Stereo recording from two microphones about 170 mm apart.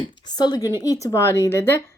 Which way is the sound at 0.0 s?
25° left (ahead or behind).